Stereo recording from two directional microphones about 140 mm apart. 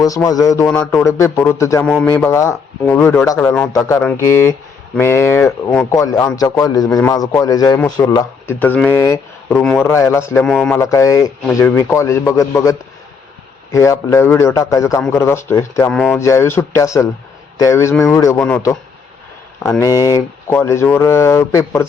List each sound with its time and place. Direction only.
0.0 s speech: 25° left (ahead or behind)
5.9 s speech: 25° left (ahead or behind)
8.1 s speech: 15° left (ahead or behind)
10.4 s a man's voice: 5° left (ahead or behind)
10.8 s speech: 20° left (ahead or behind)
13.7 s speech: 20° left (ahead or behind)
15.9 s a man's voice: 5° left (ahead or behind)
16.1 s speech: 20° left (ahead or behind)
19.8 s speech: 25° left (ahead or behind)